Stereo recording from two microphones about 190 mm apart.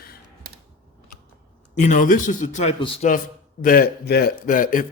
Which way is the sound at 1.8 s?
45° left (ahead or behind).